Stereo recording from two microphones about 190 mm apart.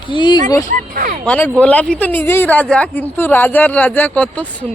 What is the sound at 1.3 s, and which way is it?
Speech, 5° left (ahead or behind).